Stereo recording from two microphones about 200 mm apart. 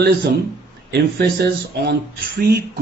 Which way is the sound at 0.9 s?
55° right (ahead or behind).